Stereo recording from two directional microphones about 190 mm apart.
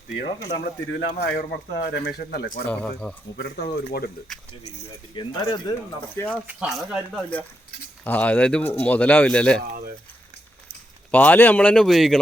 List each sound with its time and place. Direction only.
0.2 s speech: 65° left (ahead or behind)
2.6 s speech: 10° left (ahead or behind)
3.3 s speech: 60° left (ahead or behind)
5.1 s speech: 20° left (ahead or behind)
6.5 s speech: 5° right (ahead or behind)
11.1 s speech: 10° left (ahead or behind)